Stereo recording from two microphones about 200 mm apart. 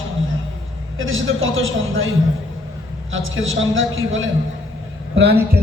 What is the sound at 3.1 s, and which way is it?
A man's voice, 80° right.